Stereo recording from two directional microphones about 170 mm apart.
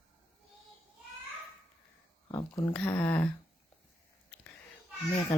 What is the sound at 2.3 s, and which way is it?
Speech, 25° left (ahead or behind).